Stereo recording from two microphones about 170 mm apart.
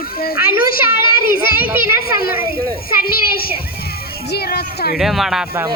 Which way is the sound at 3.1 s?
60° left (ahead or behind).